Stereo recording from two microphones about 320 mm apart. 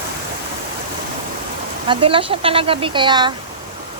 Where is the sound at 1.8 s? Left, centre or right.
Centre.